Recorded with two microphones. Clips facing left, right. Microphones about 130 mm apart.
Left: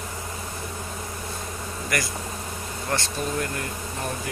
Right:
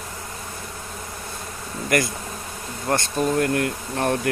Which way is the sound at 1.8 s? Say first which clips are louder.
Right 7 dB; 55° right (ahead or behind).